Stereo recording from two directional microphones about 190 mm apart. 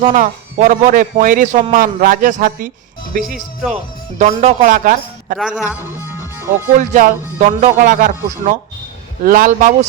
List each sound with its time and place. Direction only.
0.0 s speech: 40° right (ahead or behind)
4.2 s speech: 40° right (ahead or behind)
5.4 s speech: 5° right (ahead or behind)
6.7 s speech: 40° right (ahead or behind)